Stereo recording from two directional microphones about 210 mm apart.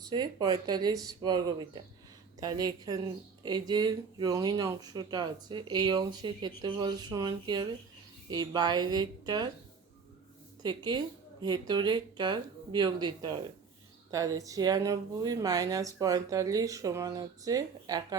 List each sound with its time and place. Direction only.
0.1 s speech: 20° right (ahead or behind)
10.6 s speech: 20° right (ahead or behind)